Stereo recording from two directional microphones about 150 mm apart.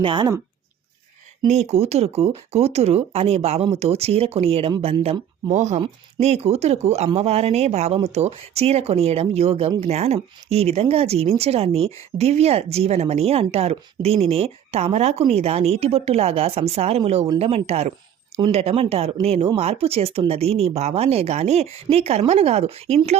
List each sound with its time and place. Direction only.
0.0 s speech: 30° right (ahead or behind)
1.5 s speech: 45° right (ahead or behind)